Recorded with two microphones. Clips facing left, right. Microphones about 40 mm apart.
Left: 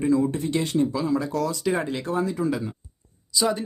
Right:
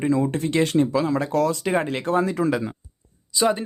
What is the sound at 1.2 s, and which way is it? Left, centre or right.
Speech, right.